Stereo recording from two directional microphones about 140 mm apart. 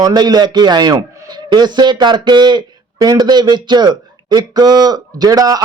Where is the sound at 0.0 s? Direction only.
30° right (ahead or behind).